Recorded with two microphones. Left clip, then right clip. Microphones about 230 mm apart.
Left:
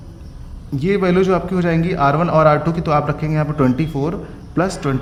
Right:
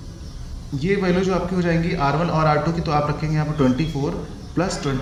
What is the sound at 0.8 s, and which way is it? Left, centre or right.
A man's voice, left.